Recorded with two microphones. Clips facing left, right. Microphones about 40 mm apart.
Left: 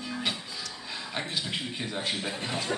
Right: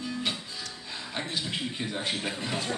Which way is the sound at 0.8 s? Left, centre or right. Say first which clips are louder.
Left 1 dB; centre.